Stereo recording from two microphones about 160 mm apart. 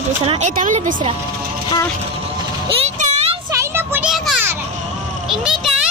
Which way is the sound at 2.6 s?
35° right (ahead or behind).